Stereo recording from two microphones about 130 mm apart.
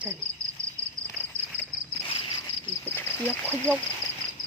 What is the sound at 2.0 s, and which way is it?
Cricket, 40° left (ahead or behind).